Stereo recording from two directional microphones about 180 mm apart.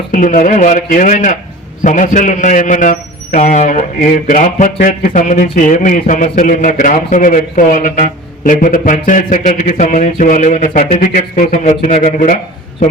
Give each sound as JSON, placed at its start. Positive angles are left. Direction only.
{"t": 0.1, "sound": "a man's voice", "side_deg": 45}